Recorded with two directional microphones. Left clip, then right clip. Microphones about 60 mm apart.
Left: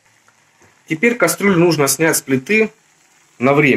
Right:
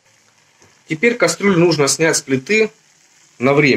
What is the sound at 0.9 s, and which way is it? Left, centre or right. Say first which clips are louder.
Speech: even; centre.